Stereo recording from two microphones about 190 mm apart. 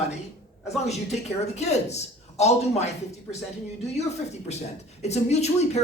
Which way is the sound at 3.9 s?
35° left (ahead or behind).